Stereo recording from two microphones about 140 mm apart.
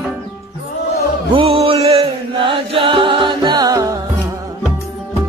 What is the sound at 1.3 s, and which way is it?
Chant, 45° right (ahead or behind).